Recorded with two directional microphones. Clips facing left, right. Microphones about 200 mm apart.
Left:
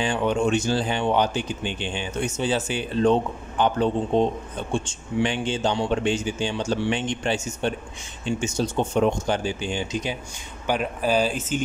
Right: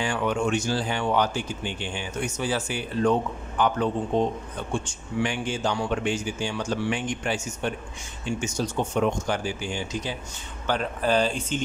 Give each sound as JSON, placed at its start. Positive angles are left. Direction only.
{"t": 0.0, "sound": "speech", "side_deg": 25}